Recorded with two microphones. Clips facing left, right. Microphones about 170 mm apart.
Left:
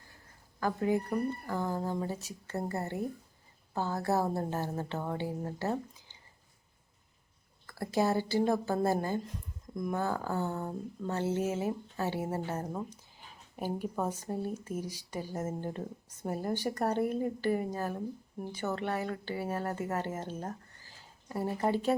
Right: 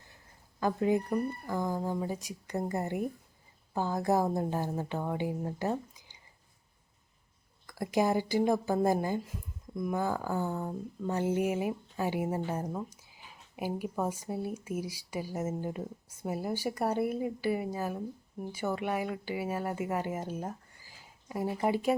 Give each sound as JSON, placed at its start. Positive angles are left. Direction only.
{"t": 0.6, "sound": "speech", "side_deg": -20}
{"t": 7.7, "sound": "speech", "side_deg": -15}